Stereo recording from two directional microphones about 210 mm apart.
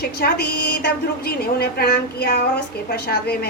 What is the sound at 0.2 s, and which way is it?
A woman's voice, 50° left (ahead or behind).